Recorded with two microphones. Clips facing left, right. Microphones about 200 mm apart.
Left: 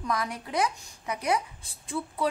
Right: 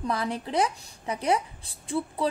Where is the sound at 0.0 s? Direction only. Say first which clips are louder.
Right 2 dB; 30° right (ahead or behind).